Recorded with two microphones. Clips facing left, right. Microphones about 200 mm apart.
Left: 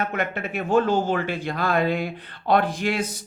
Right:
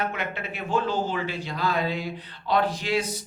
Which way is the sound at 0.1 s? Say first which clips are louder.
Left 5 dB; 50° left (ahead or behind).